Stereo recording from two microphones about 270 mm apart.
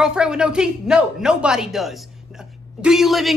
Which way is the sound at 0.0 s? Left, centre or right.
Centre.